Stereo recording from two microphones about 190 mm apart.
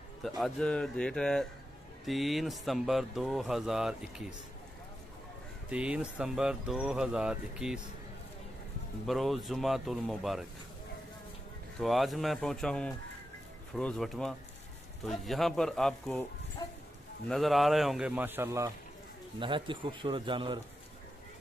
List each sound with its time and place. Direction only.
0.4 s speech: 5° left (ahead or behind)
5.7 s speech: 5° right (ahead or behind)
9.0 s speech: centre (ahead or behind)
11.8 s speech: centre (ahead or behind)
16.6 s speech: 20° left (ahead or behind)
17.3 s speech: centre (ahead or behind)
19.4 s speech: 25° right (ahead or behind)